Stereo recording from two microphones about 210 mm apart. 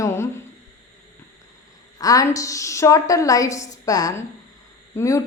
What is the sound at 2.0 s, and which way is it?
A woman's voice, 15° left (ahead or behind).